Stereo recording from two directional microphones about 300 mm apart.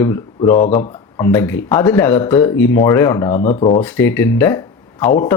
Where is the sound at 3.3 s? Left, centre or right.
Left.